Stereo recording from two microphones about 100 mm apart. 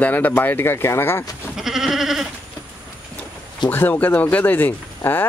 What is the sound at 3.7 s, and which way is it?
Speech, 20° left (ahead or behind).